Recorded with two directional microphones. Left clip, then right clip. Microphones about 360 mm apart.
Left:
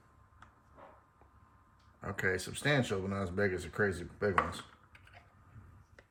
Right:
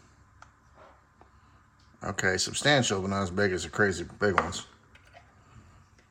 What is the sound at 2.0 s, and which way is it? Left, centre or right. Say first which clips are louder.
Speech: right 7 dB; centre.